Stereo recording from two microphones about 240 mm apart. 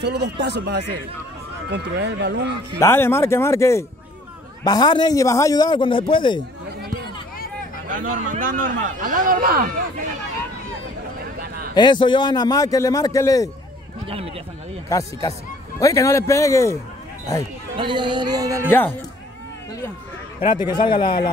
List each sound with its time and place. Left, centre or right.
0.0 s speech: right
2.8 s a man's voice: centre
7.9 s speech: right
11.7 s a man's voice: centre
14.0 s speech: right
14.9 s a man's voice: centre
17.7 s speech: centre
18.7 s a man's voice: centre
20.3 s a man's voice: left